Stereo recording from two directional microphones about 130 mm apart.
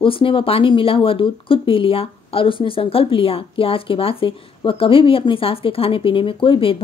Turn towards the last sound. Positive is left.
turn(degrees=45)  # may be behind; listen again after turning